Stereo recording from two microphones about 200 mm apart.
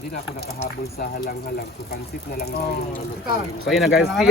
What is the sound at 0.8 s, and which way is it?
Speech, 50° left (ahead or behind).